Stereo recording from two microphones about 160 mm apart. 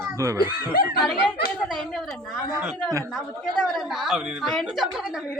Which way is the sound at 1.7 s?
Centre (ahead or behind).